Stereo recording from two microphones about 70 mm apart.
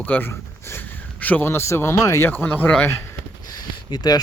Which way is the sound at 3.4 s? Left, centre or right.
Left.